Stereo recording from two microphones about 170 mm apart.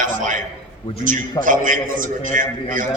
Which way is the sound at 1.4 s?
50° right (ahead or behind).